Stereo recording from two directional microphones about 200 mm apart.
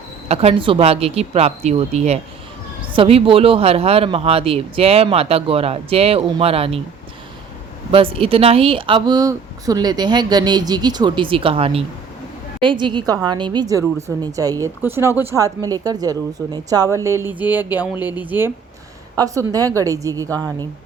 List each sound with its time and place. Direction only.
0.3 s speech: 30° right (ahead or behind)
7.9 s speech: 30° right (ahead or behind)